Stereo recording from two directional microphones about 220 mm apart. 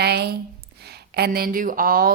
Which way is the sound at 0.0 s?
45° right (ahead or behind).